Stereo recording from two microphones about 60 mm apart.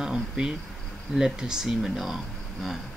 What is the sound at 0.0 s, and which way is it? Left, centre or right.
Insect, centre.